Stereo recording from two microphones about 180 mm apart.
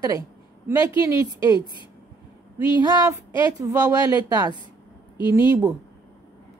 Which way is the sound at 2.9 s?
20° right (ahead or behind).